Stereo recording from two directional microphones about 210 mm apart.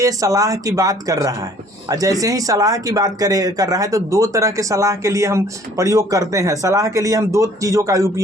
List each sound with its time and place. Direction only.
0.0 s speech: 15° right (ahead or behind)